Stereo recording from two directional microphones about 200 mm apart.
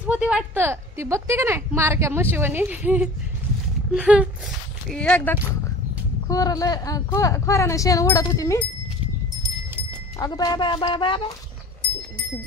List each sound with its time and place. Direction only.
0.1 s a woman's voice: 5° right (ahead or behind)
4.8 s speech: 5° left (ahead or behind)
10.1 s speech: 20° left (ahead or behind)